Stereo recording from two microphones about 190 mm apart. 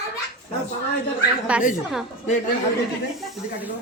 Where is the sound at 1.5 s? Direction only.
5° right (ahead or behind).